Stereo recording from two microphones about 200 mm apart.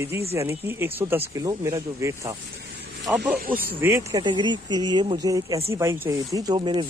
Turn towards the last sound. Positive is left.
turn(degrees=-25)  # may be behind; listen again after turning